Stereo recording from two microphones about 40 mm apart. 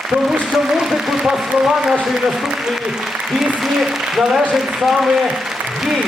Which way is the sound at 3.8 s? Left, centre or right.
Centre.